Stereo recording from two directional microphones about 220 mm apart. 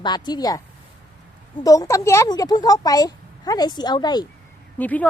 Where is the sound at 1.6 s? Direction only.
15° left (ahead or behind).